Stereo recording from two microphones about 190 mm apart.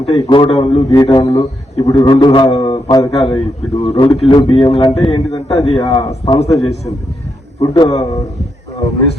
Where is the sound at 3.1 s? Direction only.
30° left (ahead or behind).